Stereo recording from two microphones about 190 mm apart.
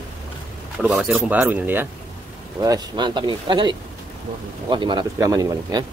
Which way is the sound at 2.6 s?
20° right (ahead or behind).